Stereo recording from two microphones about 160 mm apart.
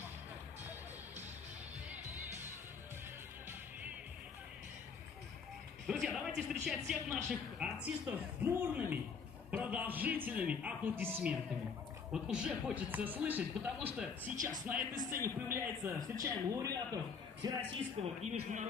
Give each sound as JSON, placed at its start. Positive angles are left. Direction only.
{"t": 5.9, "sound": "a man's voice", "side_deg": -5}
{"t": 18.2, "sound": "speech", "side_deg": -50}